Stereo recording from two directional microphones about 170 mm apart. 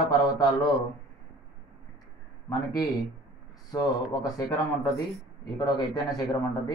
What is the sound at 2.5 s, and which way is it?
Speech, 20° left (ahead or behind).